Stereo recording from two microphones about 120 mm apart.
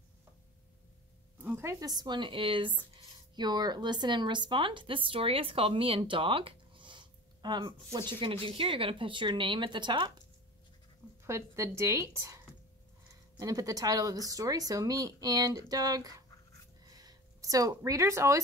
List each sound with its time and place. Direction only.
1.4 s a woman's voice: 20° right (ahead or behind); by 10.1 s 40° right (ahead or behind)
11.2 s a woman's voice: 25° right (ahead or behind)
13.4 s speech: 30° right (ahead or behind)
16.8 s a sound: 30° right (ahead or behind)